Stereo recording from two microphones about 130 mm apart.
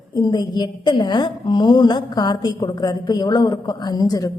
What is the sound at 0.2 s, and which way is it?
A woman's voice, 35° left (ahead or behind).